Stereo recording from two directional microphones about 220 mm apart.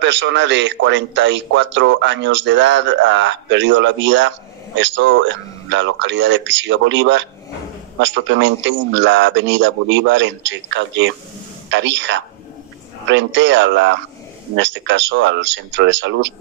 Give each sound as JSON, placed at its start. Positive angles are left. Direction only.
{"t": 0.0, "sound": "speech", "side_deg": -55}